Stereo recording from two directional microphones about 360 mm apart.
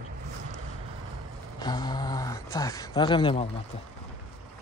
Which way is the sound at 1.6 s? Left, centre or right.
Centre.